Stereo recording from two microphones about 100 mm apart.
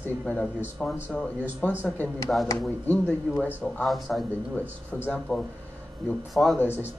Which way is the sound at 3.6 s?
Centre (ahead or behind).